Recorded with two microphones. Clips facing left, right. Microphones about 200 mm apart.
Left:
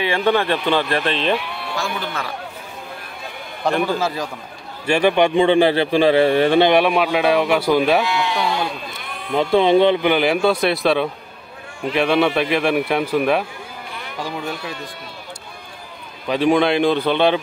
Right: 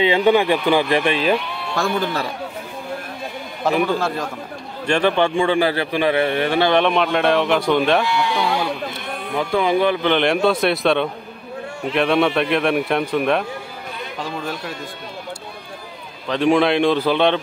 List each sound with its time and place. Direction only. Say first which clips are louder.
0.0 s speech: right 3 dB; 15° right (ahead or behind)
3.6 s a man's voice: right 1 dB; centre (ahead or behind); by 6.7 s 25° left (ahead or behind)
6.7 s a man's voice: left 1 dB; 5° left (ahead or behind)
9.3 s a man's voice: left 4 dB; 25° left (ahead or behind)
10.0 s a man's voice: even; 5° left (ahead or behind)
16.3 s a man's voice: even; centre (ahead or behind)